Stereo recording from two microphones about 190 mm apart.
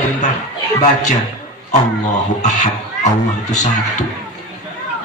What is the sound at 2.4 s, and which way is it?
A man's voice, 40° left (ahead or behind).